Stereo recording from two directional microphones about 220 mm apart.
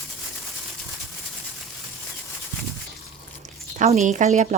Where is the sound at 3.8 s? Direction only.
35° right (ahead or behind).